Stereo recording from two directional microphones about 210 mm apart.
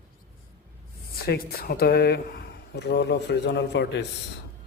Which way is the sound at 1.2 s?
50° left (ahead or behind).